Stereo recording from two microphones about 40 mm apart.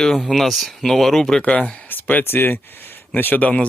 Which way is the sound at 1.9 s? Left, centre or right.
Left.